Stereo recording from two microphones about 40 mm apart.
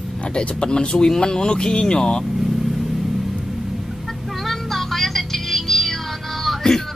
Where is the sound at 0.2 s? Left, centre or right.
Left.